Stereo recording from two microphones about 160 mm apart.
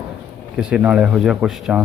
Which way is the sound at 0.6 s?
5° right (ahead or behind).